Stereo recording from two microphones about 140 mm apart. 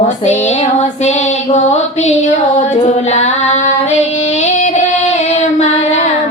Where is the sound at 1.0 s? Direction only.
55° left (ahead or behind).